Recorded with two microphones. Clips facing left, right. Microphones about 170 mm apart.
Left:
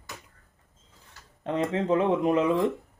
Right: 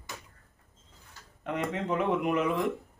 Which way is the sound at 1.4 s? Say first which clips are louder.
Left 5 dB; 30° left (ahead or behind).